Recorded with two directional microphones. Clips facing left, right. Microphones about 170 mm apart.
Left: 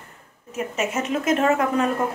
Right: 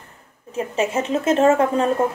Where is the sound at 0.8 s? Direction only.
30° right (ahead or behind).